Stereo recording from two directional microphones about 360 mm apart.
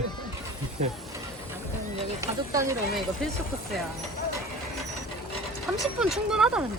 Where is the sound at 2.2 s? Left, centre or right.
Centre.